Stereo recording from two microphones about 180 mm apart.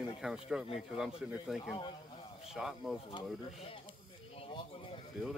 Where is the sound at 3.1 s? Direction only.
25° left (ahead or behind).